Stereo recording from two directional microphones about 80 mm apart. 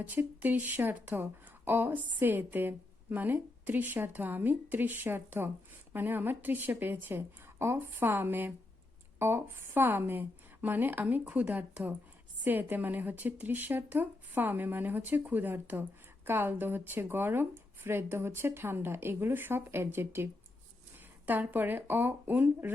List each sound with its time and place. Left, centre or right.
0.0 s speech: right